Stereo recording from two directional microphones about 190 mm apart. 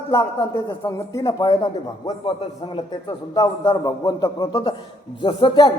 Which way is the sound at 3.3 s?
20° left (ahead or behind).